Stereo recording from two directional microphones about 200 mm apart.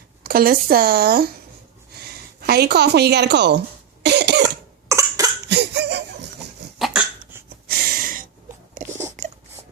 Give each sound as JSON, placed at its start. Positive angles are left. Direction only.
{"t": 0.2, "sound": "speech", "side_deg": -50}
{"t": 2.4, "sound": "a woman's voice", "side_deg": -50}
{"t": 4.0, "sound": "cough", "side_deg": -55}
{"t": 4.4, "sound": "cough", "side_deg": -15}
{"t": 5.5, "sound": "a sound", "side_deg": -55}
{"t": 6.7, "sound": "hiccup", "side_deg": 0}
{"t": 7.7, "sound": "snort", "side_deg": -50}
{"t": 8.9, "sound": "a sound", "side_deg": -15}